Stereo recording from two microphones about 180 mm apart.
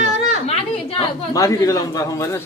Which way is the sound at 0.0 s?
35° right (ahead or behind).